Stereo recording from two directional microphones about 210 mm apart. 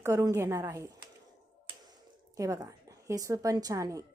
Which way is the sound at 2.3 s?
15° right (ahead or behind).